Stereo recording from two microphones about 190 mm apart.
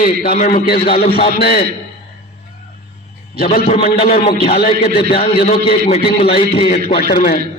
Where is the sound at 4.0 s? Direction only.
35° left (ahead or behind).